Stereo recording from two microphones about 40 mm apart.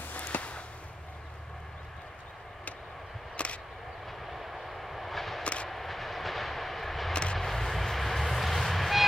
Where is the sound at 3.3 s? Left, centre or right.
Left.